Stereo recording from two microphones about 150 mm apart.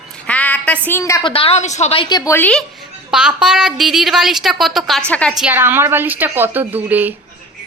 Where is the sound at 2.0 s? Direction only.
25° left (ahead or behind).